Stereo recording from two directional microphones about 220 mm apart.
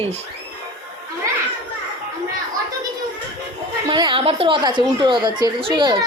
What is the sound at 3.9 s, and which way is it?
A woman's voice, 20° right (ahead or behind).